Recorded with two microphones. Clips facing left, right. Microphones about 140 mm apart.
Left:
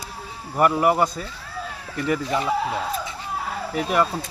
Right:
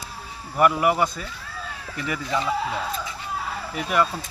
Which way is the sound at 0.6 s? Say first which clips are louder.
Left 1 dB; 35° left (ahead or behind).